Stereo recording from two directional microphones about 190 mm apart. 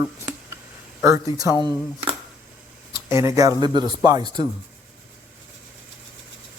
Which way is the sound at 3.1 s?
15° right (ahead or behind).